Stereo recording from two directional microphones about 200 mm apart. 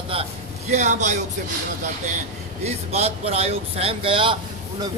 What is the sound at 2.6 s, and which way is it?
A man's voice, 30° right (ahead or behind).